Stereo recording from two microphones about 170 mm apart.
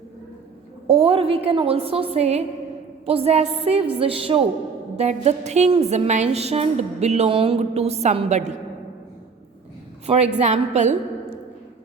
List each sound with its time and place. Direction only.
0.9 s a woman's voice: 35° right (ahead or behind)
10.1 s a woman's voice: 40° right (ahead or behind)